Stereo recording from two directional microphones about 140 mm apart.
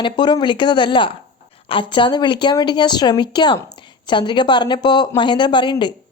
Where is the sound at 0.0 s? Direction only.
30° left (ahead or behind).